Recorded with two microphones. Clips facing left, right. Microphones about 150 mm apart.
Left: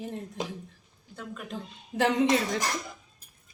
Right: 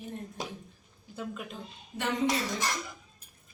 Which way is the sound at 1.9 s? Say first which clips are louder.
Left 10 dB; 85° left.